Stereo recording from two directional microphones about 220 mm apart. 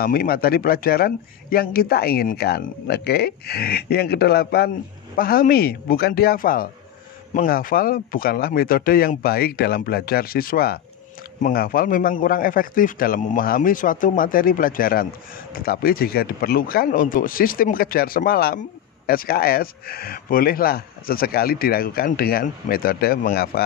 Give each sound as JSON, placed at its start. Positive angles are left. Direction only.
{"t": 0.0, "sound": "a man's voice", "side_deg": 40}